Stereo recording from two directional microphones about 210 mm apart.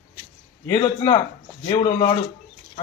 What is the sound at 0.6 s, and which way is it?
A man's voice, 20° left (ahead or behind).